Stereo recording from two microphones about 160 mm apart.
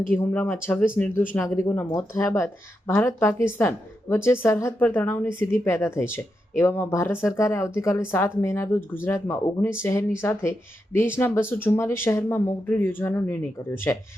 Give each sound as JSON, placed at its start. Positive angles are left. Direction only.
{"t": 0.1, "sound": "speech", "side_deg": 10}